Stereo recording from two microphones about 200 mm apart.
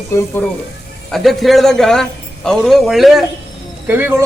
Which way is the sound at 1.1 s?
Centre (ahead or behind).